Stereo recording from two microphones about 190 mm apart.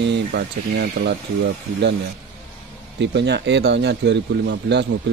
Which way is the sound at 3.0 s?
65° right (ahead or behind).